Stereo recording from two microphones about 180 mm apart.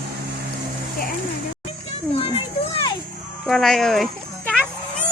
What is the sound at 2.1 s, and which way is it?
Speech, 35° left (ahead or behind).